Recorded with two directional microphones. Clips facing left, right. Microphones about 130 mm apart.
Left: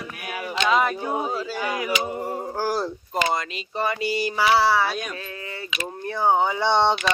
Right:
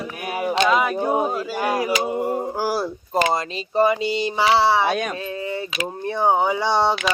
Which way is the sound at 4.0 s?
25° right (ahead or behind).